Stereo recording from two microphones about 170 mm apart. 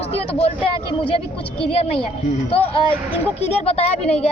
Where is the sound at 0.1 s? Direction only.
35° left (ahead or behind).